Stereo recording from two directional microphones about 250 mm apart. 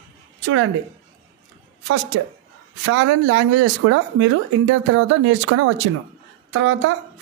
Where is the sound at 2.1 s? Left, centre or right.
Right.